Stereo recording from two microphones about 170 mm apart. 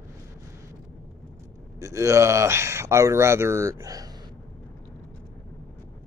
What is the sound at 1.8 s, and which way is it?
Speech, 20° right (ahead or behind).